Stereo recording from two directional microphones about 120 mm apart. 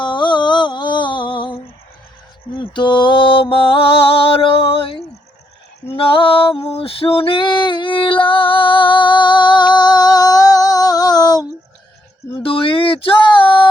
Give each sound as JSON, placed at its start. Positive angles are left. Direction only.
{"t": 0.0, "sound": "music", "side_deg": 40}
{"t": 2.6, "sound": "mantra", "side_deg": 40}
{"t": 5.9, "sound": "female singing", "side_deg": 50}
{"t": 12.4, "sound": "a sound", "side_deg": 50}